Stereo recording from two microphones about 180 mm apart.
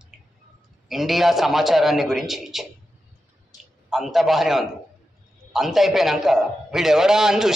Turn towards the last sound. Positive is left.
turn(degrees=-5)  # may be behind; listen again after turning